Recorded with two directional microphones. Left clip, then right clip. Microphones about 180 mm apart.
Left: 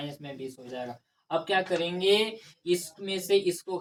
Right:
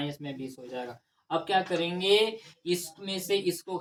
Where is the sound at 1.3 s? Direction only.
20° right (ahead or behind).